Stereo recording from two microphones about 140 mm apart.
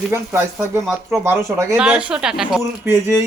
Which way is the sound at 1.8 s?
5° right (ahead or behind).